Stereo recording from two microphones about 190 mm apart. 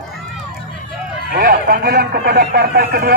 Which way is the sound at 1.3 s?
50° right (ahead or behind).